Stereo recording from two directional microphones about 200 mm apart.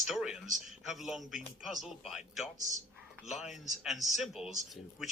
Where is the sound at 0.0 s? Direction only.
Centre (ahead or behind).